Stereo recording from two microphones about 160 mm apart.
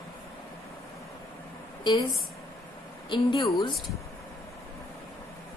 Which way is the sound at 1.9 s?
30° left (ahead or behind).